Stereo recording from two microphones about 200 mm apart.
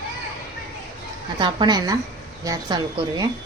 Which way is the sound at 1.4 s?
20° right (ahead or behind).